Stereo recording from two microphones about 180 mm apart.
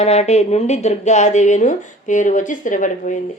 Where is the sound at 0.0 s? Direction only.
35° left (ahead or behind).